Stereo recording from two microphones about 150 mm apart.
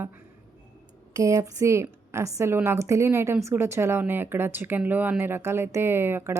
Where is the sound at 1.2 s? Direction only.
20° right (ahead or behind).